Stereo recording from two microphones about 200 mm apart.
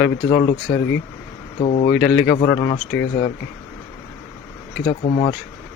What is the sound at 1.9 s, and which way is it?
Speech, 5° left (ahead or behind).